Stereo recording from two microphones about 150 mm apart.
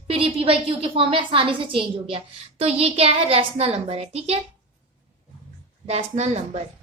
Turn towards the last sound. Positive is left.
turn(degrees=-45)  # may be behind; listen again after turning